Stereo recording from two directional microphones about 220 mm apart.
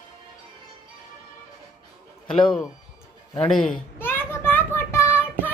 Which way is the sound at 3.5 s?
5° left (ahead or behind).